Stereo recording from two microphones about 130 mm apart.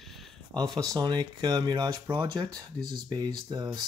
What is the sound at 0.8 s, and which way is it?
Speech, 30° right (ahead or behind).